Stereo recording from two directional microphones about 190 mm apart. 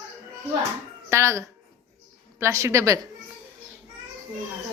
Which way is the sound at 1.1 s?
15° right (ahead or behind).